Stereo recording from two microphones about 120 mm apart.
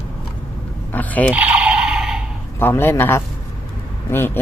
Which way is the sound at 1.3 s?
10° right (ahead or behind).